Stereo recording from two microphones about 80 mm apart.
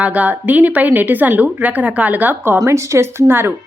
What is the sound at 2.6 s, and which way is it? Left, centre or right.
Speech, right.